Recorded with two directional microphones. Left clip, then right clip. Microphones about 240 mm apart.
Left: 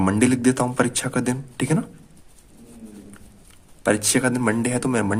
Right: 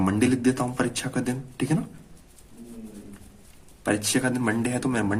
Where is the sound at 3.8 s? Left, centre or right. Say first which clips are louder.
Left 5 dB; left.